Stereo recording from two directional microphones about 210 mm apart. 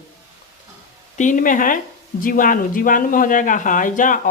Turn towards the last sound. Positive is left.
turn(degrees=40)  # may be behind; listen again after turning